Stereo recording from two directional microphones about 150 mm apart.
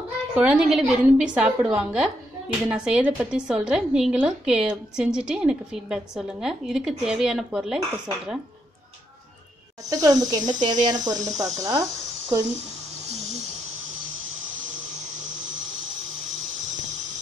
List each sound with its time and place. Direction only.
0.4 s a woman's voice: 5° right (ahead or behind)
9.8 s speech: 25° right (ahead or behind)
11.1 s speech: 50° right (ahead or behind)
11.6 s speech: 25° right (ahead or behind)
13.1 s a sound: 50° right (ahead or behind)